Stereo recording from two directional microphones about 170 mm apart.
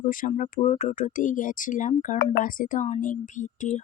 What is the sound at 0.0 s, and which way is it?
A woman's voice, 50° left (ahead or behind).